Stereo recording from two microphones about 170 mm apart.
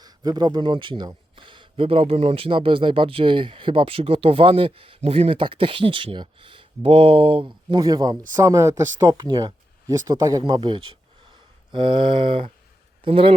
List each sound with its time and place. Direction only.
0.0 s speech: 25° right (ahead or behind)
11.3 s a sound: 30° right (ahead or behind)
13.1 s speech: 30° right (ahead or behind)